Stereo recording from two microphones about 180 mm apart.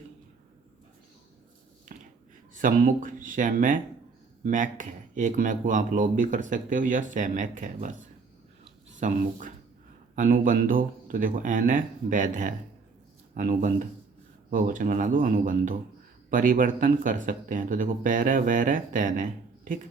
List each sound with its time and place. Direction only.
2.6 s speech: 50° right (ahead or behind)
9.0 s speech: 45° right (ahead or behind)